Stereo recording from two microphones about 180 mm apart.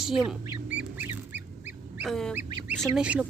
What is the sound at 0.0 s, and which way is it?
Speech, centre (ahead or behind).